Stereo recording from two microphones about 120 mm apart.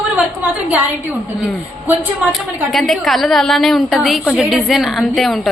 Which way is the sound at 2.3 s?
Centre (ahead or behind).